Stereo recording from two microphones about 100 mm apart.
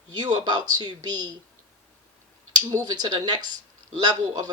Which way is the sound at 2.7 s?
45° right (ahead or behind).